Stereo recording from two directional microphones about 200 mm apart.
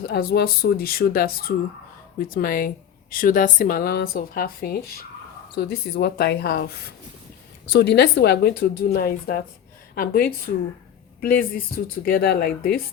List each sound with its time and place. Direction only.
0.0 s a woman's voice: 50° left (ahead or behind)